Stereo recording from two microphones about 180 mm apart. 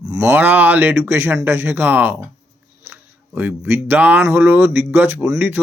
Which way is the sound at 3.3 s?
10° right (ahead or behind).